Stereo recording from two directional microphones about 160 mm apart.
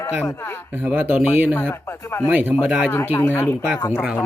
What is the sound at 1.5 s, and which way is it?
Speech, 15° left (ahead or behind).